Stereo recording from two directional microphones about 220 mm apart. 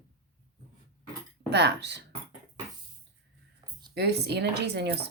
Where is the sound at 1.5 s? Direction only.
50° right (ahead or behind).